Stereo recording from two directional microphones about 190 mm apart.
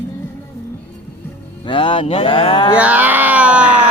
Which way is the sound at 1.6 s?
25° left (ahead or behind).